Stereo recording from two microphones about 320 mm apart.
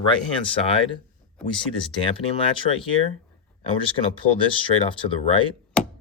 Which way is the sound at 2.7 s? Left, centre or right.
Centre.